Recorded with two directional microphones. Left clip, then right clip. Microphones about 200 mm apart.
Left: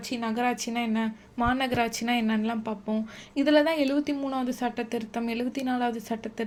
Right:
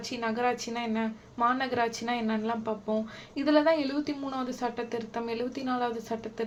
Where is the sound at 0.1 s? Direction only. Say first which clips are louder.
Left 1 dB; 45° left (ahead or behind).